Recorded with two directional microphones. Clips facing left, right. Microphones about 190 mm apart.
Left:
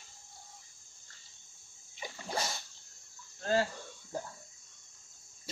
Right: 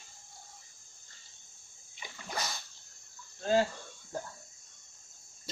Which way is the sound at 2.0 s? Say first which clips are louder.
Left 2 dB; 30° left (ahead or behind).